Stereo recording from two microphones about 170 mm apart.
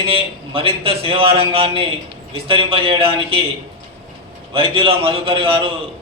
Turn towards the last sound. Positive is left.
turn(degrees=-30)  # may be behind; listen again after turning